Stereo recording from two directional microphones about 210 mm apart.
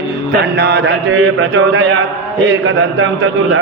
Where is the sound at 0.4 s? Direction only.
50° right (ahead or behind).